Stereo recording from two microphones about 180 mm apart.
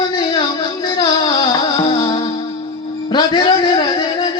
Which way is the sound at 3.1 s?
25° left (ahead or behind).